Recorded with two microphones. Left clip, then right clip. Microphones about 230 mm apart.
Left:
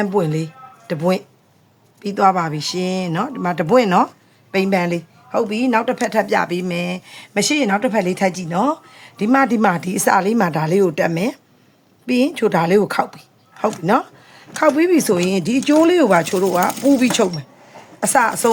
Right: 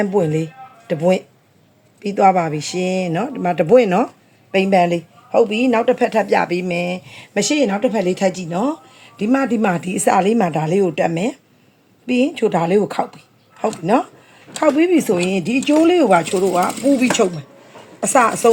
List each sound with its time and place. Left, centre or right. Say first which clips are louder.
0.0 s speech: right 2 dB; centre